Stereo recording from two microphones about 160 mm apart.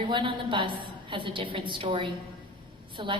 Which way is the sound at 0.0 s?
30° right (ahead or behind).